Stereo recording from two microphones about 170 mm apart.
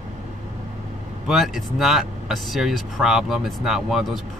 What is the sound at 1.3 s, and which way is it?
Speech, centre (ahead or behind).